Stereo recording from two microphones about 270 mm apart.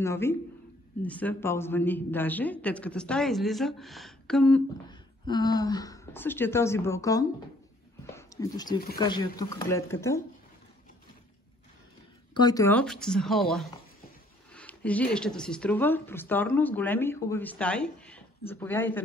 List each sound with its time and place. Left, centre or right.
0.0 s a woman's voice: centre
4.8 s speech: centre
12.4 s a woman's voice: centre
14.5 s a sound: centre
15.1 s speech: centre